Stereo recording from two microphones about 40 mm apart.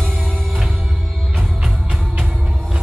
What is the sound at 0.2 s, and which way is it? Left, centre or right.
Music, centre.